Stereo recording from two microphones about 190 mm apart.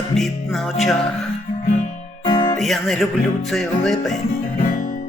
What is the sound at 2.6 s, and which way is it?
Speech, centre (ahead or behind).